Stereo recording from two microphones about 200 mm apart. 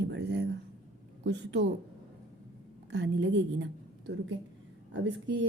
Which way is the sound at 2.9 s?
60° right (ahead or behind).